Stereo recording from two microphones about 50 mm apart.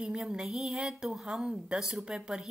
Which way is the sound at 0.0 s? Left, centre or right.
Centre.